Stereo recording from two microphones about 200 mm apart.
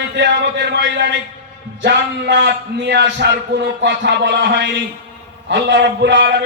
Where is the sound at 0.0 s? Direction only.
60° right (ahead or behind).